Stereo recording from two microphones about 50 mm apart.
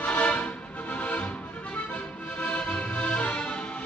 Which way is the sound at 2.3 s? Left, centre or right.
Left.